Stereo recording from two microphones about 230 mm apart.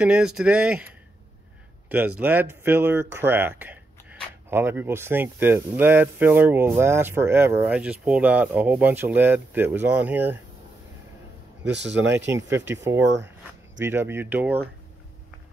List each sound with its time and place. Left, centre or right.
0.0 s speech: centre
11.6 s speech: right
12.3 s speech: centre